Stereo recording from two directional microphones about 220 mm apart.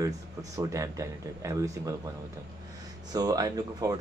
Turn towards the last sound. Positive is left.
turn(degrees=-15)  # may be behind; listen again after turning